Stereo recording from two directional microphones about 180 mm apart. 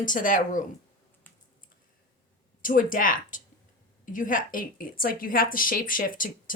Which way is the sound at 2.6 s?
50° left (ahead or behind).